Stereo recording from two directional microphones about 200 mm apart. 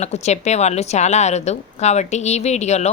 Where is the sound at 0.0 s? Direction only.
35° left (ahead or behind).